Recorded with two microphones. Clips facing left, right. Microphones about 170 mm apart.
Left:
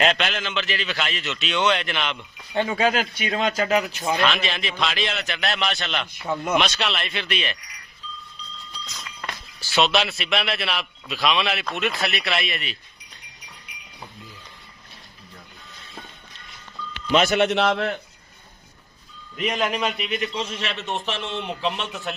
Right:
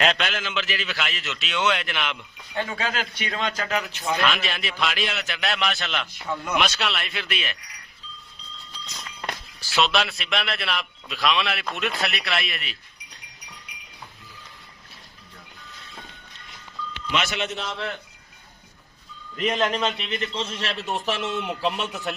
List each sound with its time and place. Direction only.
0.0 s a man's voice: centre (ahead or behind)
2.6 s speech: 20° left (ahead or behind)
4.2 s a man's voice: 5° right (ahead or behind)
6.2 s speech: 20° left (ahead or behind)
6.6 s a man's voice: 5° right (ahead or behind)
9.7 s a man's voice: centre (ahead or behind)
17.1 s a man's voice: 35° left (ahead or behind)
17.5 s a man's voice: 85° left
19.4 s speech: 5° left (ahead or behind)
20.1 s a man's voice: 30° right (ahead or behind)
20.7 s a man's voice: centre (ahead or behind)